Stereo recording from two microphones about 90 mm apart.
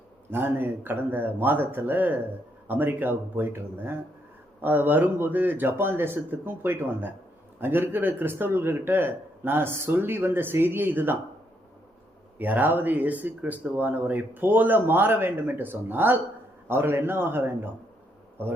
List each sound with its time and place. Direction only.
0.3 s speech: 25° right (ahead or behind)
12.4 s speech: 20° right (ahead or behind)